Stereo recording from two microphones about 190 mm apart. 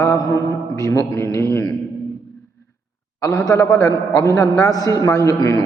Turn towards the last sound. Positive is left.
turn(degrees=20)  # may be behind; listen again after turning